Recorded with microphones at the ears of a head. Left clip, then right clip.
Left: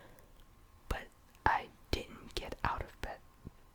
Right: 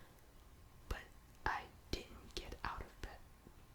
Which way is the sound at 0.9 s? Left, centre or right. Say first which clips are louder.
Left 8 dB; left.